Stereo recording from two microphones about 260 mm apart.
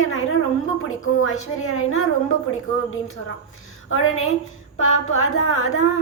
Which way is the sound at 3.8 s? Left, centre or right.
Left.